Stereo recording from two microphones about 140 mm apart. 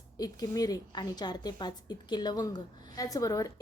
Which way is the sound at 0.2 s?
25° left (ahead or behind).